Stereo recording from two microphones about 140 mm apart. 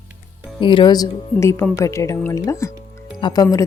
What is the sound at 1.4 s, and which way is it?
A woman's voice, 20° left (ahead or behind).